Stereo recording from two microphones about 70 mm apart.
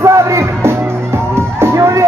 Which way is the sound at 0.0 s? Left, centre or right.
Right.